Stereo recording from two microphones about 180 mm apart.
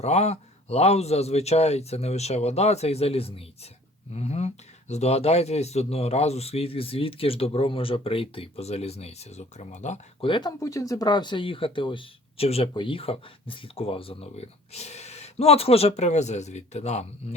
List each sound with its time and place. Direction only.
0.0 s speech: 35° left (ahead or behind)